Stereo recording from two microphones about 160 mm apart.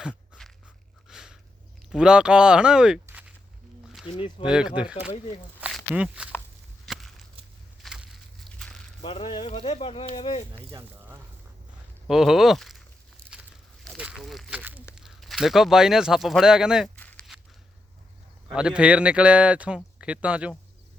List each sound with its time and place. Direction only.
0.1 s dog: 5° left (ahead or behind)
1.0 s a sound: 5° right (ahead or behind)
1.9 s speech: 5° right (ahead or behind)
4.2 s speech: 35° left (ahead or behind)
4.5 s speech: 5° right (ahead or behind)
6.8 s a sound: centre (ahead or behind)
9.0 s speech: 30° left (ahead or behind)
12.0 s speech: centre (ahead or behind)
13.8 s a sound: 5° right (ahead or behind)
14.6 s duck: 10° right (ahead or behind)
14.9 s speech: centre (ahead or behind)
16.9 s a sound: 10° left (ahead or behind)
18.5 s speech: 5° right (ahead or behind)